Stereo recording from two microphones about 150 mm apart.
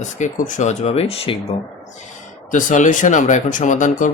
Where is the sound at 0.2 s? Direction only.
55° left (ahead or behind).